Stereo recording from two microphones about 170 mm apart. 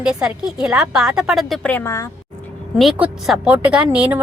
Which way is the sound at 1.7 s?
15° left (ahead or behind).